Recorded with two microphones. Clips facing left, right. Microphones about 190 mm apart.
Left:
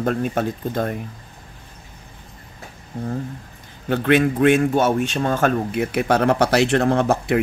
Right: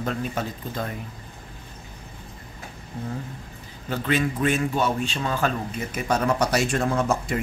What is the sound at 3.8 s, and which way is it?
A man's voice, 60° left (ahead or behind).